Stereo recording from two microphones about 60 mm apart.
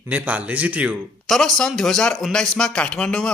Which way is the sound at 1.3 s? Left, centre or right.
Centre.